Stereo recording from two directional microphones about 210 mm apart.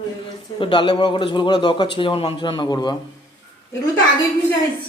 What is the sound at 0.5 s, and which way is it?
A man's voice, 25° left (ahead or behind).